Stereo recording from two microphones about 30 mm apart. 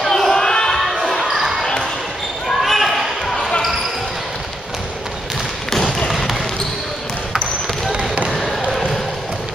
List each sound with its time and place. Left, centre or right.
0.0 s a sound: centre
1.2 s basketball bounce: centre
6.0 s basketball bounce: centre
7.9 s basketball bounce: right
8.3 s basketball bounce: centre